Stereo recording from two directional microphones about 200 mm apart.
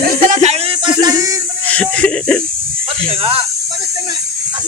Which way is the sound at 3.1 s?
30° right (ahead or behind).